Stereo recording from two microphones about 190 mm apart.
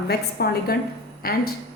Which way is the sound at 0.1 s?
55° left (ahead or behind).